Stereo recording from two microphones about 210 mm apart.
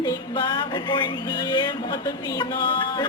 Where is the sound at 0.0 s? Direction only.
20° left (ahead or behind).